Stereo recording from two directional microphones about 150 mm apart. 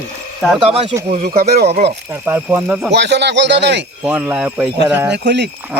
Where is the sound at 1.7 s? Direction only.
45° right (ahead or behind).